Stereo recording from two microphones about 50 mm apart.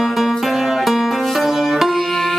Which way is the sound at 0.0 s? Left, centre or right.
Centre.